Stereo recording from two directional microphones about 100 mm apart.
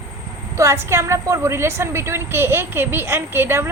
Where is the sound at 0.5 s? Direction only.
30° right (ahead or behind).